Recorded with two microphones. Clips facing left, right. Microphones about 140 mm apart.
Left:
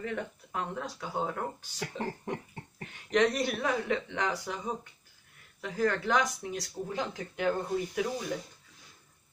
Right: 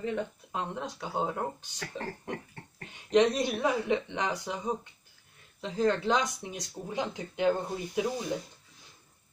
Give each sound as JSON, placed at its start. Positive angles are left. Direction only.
{"t": 0.0, "sound": "speech", "side_deg": -20}
{"t": 2.3, "sound": "cough", "side_deg": 15}
{"t": 2.9, "sound": "speech", "side_deg": -20}